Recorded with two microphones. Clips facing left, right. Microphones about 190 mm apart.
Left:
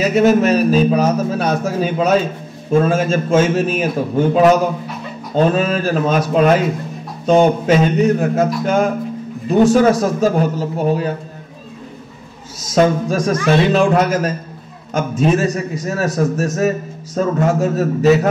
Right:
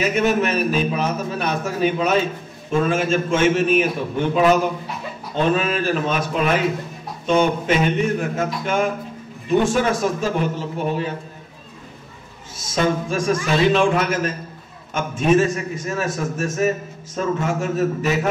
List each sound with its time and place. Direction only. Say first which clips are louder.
0.0 s a man's voice: left 6 dB; 40° left (ahead or behind)
12.5 s a man's voice: left 6 dB; 40° left (ahead or behind)